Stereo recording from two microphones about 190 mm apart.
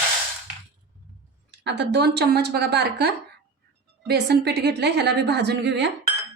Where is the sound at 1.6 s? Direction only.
65° right (ahead or behind).